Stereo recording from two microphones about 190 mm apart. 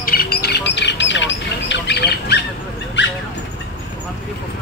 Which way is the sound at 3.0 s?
65° left (ahead or behind).